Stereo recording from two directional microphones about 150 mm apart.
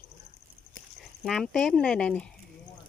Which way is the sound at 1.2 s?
Centre (ahead or behind).